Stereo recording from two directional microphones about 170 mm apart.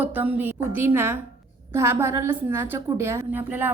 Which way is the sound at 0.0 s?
10° right (ahead or behind).